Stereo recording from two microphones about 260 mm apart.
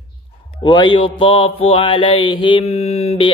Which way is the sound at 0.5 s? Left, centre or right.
Centre.